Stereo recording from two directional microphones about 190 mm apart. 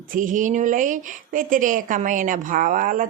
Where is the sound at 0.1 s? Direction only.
45° right (ahead or behind).